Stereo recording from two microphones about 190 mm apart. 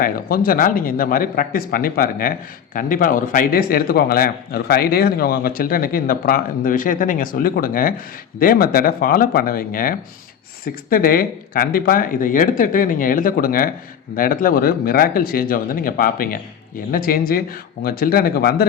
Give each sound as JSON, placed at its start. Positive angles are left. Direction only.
{"t": 0.0, "sound": "speech", "side_deg": 50}